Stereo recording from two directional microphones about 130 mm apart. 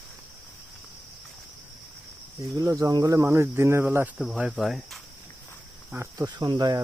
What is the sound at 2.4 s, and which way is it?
Cricket, 25° right (ahead or behind).